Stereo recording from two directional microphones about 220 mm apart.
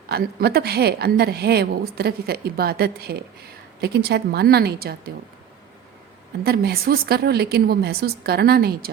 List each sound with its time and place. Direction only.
0.1 s a woman's voice: 45° right (ahead or behind)
6.4 s a woman's voice: 45° right (ahead or behind)